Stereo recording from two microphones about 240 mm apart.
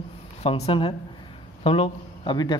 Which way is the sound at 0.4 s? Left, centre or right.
Left.